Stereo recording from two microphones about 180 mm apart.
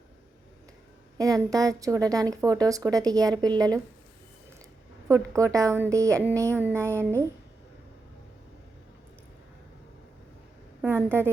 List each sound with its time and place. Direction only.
1.2 s a woman's voice: 20° right (ahead or behind)
5.0 s a woman's voice: 15° right (ahead or behind)
10.8 s a woman's voice: 10° right (ahead or behind)